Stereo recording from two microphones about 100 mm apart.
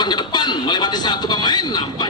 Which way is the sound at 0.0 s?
45° left (ahead or behind).